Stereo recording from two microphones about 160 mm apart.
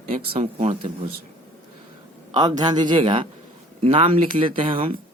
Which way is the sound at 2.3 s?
25° right (ahead or behind).